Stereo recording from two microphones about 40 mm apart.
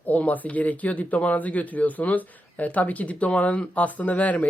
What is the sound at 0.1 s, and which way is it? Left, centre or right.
Speech, left.